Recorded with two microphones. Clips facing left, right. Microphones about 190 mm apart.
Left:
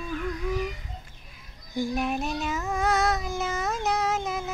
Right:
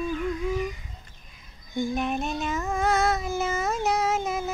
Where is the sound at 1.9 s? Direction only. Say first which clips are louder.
Even; 5° left (ahead or behind).